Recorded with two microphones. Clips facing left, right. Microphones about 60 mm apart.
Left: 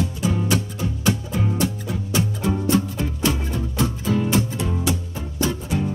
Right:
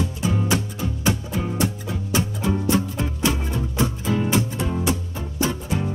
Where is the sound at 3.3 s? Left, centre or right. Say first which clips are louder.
Left 1 dB; centre.